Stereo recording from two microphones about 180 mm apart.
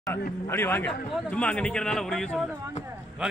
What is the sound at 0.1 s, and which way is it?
A man's voice, 10° left (ahead or behind).